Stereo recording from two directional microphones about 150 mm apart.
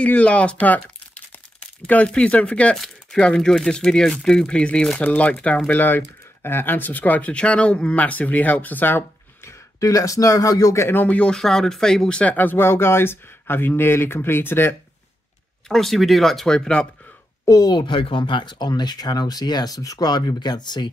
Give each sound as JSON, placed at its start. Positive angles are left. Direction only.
{"t": 0.0, "sound": "speech", "side_deg": 10}
{"t": 15.7, "sound": "speech", "side_deg": 0}
{"t": 17.5, "sound": "speech", "side_deg": 25}